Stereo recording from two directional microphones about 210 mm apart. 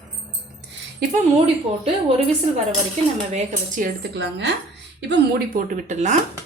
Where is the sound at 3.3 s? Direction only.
40° right (ahead or behind); by 4.5 s 55° right (ahead or behind).